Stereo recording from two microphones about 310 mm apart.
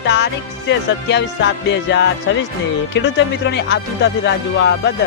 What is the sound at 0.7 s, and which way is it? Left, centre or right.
Speech, left.